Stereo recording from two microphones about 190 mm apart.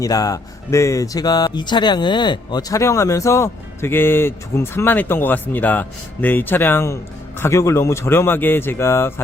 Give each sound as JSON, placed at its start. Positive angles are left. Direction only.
{"t": 0.0, "sound": "speech", "side_deg": 20}